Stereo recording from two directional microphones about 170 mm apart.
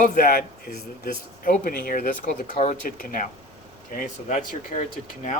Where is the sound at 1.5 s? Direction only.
55° left (ahead or behind).